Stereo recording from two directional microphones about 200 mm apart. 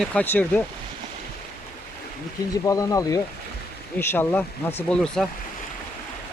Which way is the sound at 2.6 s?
15° left (ahead or behind).